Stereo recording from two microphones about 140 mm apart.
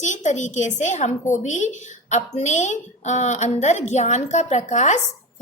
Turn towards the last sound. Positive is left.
turn(degrees=55)  # may be behind; listen again after turning